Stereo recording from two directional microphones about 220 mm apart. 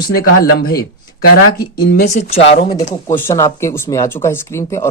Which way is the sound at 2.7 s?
15° left (ahead or behind).